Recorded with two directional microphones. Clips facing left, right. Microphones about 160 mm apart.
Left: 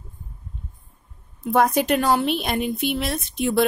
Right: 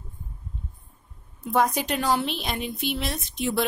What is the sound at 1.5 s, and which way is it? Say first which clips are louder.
A woman's voice: left 5 dB; 60° left (ahead or behind).